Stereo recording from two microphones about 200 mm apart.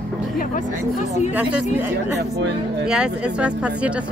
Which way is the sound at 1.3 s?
5° right (ahead or behind).